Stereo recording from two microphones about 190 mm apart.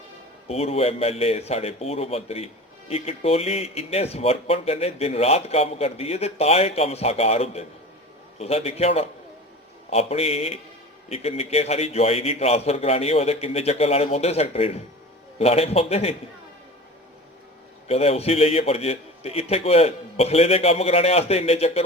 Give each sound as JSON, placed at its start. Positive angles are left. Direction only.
{"t": 0.4, "sound": "speech", "side_deg": 35}
{"t": 17.8, "sound": "speech", "side_deg": 30}